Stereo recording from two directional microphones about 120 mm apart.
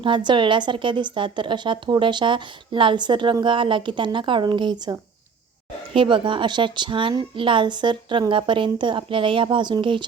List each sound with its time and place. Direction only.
0.0 s a woman's voice: 40° right (ahead or behind)
5.9 s a woman's voice: 45° right (ahead or behind)